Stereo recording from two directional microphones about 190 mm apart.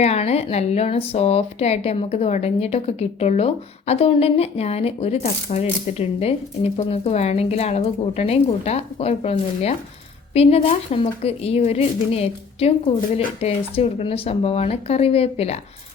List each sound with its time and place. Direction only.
0.0 s speech: 35° left (ahead or behind)